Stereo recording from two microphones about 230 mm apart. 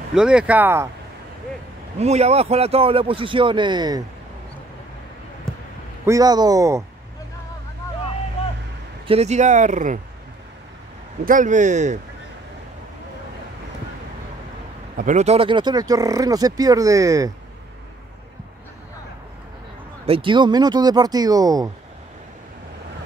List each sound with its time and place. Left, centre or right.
0.1 s speech: centre
2.0 s a man's voice: right
5.5 s basketball bounce: centre
6.0 s speech: centre
9.0 s speech: right
11.2 s speech: right
15.0 s speech: right; by 17.3 s centre
20.1 s speech: right